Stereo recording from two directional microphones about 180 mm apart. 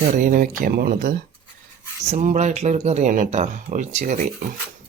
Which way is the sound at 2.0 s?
40° right (ahead or behind).